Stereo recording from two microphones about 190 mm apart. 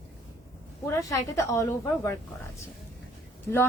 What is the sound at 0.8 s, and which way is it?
A woman's voice, 15° left (ahead or behind).